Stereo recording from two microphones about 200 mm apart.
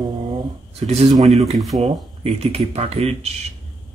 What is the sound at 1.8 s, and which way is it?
Speech, 30° right (ahead or behind).